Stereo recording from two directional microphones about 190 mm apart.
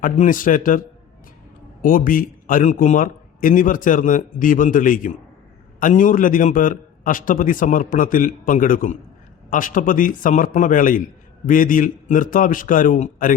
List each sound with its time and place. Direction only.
0.0 s a man's voice: 45° left (ahead or behind)